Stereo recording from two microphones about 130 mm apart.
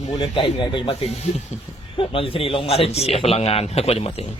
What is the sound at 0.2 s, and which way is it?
Speech, 40° left (ahead or behind).